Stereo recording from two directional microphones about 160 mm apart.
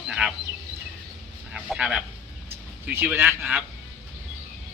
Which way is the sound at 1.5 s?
5° right (ahead or behind).